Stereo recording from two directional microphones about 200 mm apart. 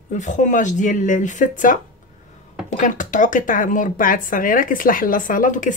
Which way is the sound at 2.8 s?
40° left (ahead or behind).